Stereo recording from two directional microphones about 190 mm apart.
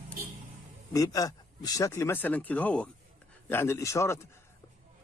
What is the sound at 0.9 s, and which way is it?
Speech, 20° left (ahead or behind).